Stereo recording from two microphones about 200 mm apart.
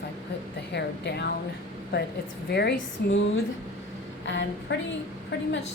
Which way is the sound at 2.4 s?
55° left (ahead or behind).